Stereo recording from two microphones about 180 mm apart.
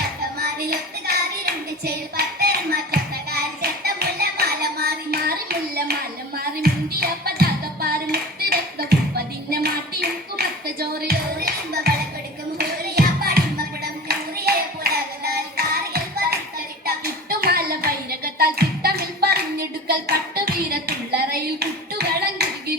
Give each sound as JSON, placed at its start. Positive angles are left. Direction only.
{"t": 0.3, "sound": "clapping", "side_deg": -60}
{"t": 12.5, "sound": "music", "side_deg": -60}